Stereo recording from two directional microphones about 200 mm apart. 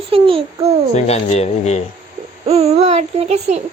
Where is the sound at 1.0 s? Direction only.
35° left (ahead or behind).